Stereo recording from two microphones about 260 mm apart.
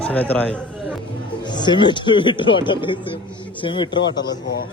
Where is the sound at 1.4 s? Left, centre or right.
Centre.